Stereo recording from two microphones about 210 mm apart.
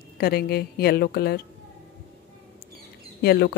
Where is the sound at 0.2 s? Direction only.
45° left (ahead or behind).